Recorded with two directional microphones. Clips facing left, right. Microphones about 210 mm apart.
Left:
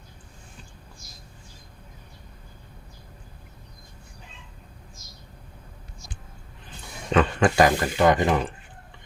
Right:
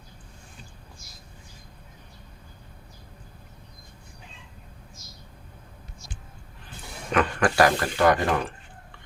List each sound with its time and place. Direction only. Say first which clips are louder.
7.1 s speech: left 3 dB; 25° left (ahead or behind)